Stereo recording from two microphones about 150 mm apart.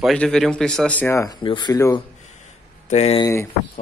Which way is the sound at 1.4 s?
30° left (ahead or behind).